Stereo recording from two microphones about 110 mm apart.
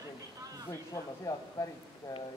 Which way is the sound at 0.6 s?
30° left (ahead or behind).